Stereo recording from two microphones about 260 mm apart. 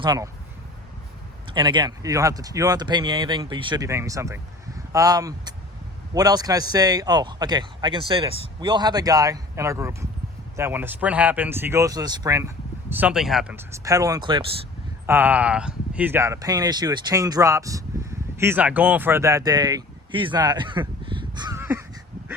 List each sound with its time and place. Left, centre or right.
0.0 s a man's voice: centre
1.5 s a man's voice: centre